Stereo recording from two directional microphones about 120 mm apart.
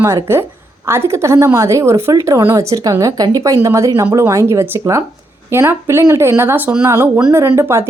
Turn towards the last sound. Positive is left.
turn(degrees=-20)  # may be behind; listen again after turning